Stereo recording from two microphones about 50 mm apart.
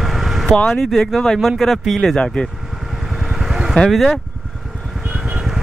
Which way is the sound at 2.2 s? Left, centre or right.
Centre.